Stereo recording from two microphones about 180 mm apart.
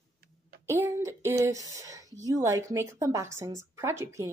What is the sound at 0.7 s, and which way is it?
A woman's voice, 15° right (ahead or behind).